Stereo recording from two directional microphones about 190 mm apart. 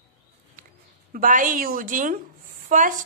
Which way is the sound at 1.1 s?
45° right (ahead or behind).